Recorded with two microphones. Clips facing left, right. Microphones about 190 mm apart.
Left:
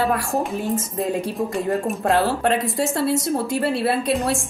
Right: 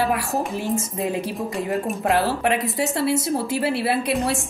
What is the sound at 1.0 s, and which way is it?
A woman's voice, centre (ahead or behind).